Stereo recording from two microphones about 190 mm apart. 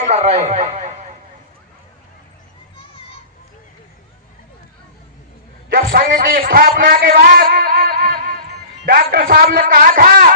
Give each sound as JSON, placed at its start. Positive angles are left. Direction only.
{"t": 0.0, "sound": "a man's voice", "side_deg": -35}
{"t": 5.7, "sound": "a man's voice", "side_deg": -50}